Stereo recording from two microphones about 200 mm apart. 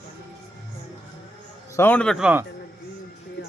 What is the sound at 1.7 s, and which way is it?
Speech, 10° left (ahead or behind).